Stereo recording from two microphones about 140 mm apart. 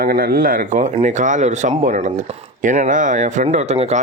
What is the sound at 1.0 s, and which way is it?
Speech, 65° right (ahead or behind).